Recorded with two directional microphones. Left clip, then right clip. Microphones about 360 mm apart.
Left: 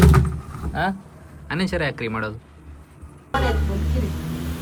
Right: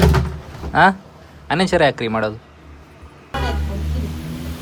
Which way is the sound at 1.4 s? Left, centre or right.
Centre.